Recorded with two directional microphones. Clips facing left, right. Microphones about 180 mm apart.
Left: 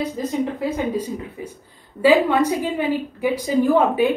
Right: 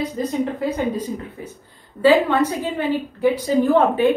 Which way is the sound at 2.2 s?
10° left (ahead or behind).